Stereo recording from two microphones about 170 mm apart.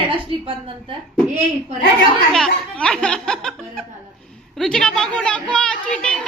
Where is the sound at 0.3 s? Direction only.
30° right (ahead or behind).